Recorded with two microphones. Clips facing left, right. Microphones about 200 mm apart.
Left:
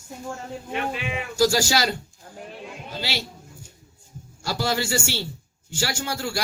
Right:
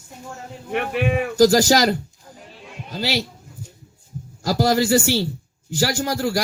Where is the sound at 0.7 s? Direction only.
60° right (ahead or behind).